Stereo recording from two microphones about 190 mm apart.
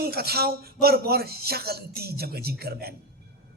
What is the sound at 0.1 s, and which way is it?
A man's voice, 55° right (ahead or behind).